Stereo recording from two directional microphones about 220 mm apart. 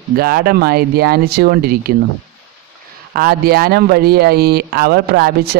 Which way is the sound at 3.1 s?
40° right (ahead or behind).